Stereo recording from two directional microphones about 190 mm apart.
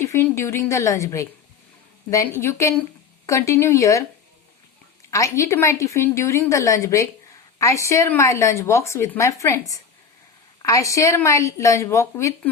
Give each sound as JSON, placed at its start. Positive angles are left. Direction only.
{"t": 0.0, "sound": "speech", "side_deg": 15}
{"t": 5.1, "sound": "speech", "side_deg": 15}